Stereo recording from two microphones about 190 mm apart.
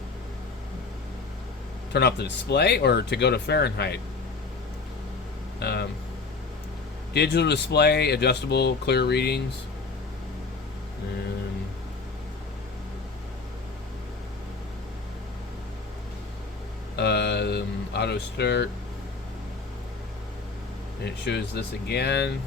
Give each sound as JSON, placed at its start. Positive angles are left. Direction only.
{"t": 1.9, "sound": "speech", "side_deg": 60}
{"t": 5.5, "sound": "speech", "side_deg": 60}
{"t": 7.1, "sound": "speech", "side_deg": 60}
{"t": 17.0, "sound": "a sound", "side_deg": 60}
{"t": 21.0, "sound": "speech", "side_deg": 65}